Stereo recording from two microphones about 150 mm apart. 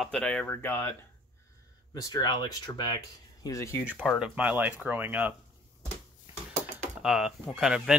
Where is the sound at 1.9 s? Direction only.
25° left (ahead or behind).